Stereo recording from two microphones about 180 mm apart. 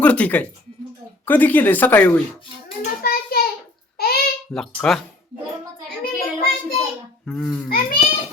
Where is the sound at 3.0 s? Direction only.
55° left (ahead or behind).